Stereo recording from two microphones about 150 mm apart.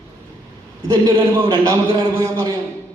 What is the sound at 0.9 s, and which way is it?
A man's voice, 25° right (ahead or behind).